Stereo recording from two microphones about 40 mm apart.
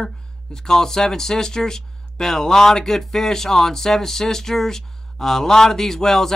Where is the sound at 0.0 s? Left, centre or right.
Centre.